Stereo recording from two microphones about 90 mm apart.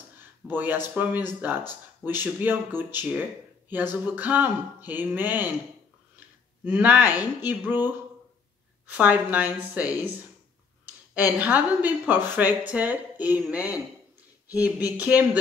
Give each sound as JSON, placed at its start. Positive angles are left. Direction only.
{"t": 0.5, "sound": "a woman's voice", "side_deg": -25}
{"t": 11.3, "sound": "a woman's voice", "side_deg": -20}